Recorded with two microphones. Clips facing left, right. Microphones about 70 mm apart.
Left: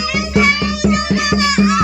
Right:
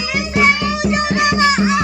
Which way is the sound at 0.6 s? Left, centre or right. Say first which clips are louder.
Left 1 dB; right.